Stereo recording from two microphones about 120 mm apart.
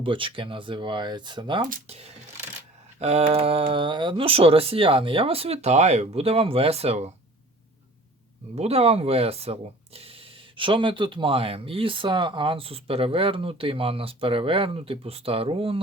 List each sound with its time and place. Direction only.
0.0 s speech: 45° right (ahead or behind)
1.9 s speech: 60° right (ahead or behind)
8.5 s speech: 60° right (ahead or behind)